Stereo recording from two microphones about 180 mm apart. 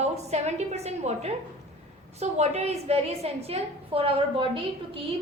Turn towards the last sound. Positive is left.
turn(degrees=-30)  # may be behind; listen again after turning